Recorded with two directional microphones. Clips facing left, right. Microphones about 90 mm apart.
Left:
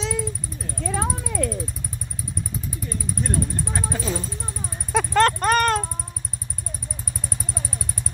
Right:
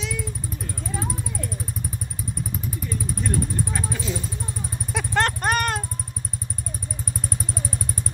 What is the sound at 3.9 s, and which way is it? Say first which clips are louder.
Vehicle: left 2 dB; 40° left (ahead or behind).